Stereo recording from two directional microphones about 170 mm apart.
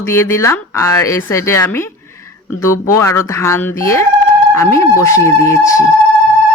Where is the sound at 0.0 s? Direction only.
15° left (ahead or behind).